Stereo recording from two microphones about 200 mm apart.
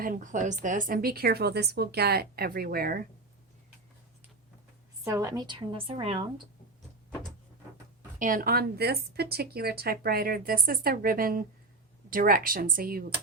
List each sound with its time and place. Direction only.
0.0 s speech: 40° right (ahead or behind)
5.0 s a woman's voice: 15° right (ahead or behind)
8.2 s speech: 45° right (ahead or behind)